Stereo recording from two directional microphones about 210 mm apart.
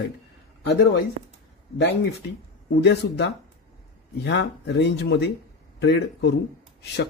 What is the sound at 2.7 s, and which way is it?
Speech, 55° left (ahead or behind).